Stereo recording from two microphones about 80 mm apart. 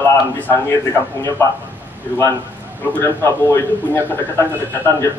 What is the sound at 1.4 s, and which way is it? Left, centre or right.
Speech, left.